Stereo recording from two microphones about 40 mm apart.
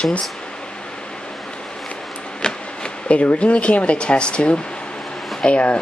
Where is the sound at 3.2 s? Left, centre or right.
Left.